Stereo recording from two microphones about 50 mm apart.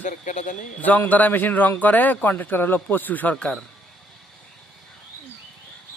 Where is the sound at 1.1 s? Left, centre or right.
Left.